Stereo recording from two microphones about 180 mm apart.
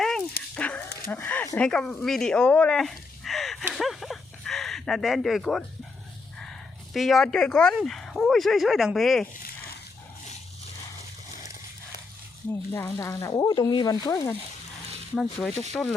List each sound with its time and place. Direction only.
0.5 s dog: 5° left (ahead or behind)
1.1 s speech: 10° left (ahead or behind)
3.7 s livestock: centre (ahead or behind)
6.9 s speech: centre (ahead or behind)
12.7 s speech: 20° left (ahead or behind)
15.1 s speech: 5° left (ahead or behind)